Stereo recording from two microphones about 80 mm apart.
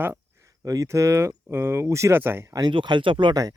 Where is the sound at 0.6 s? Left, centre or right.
Right.